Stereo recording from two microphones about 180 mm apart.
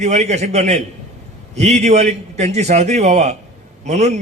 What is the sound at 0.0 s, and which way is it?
A man's voice, 40° right (ahead or behind).